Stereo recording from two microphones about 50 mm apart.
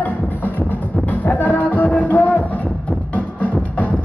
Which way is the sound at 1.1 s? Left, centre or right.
Left.